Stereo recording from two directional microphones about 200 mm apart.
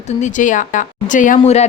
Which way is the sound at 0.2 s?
40° left (ahead or behind).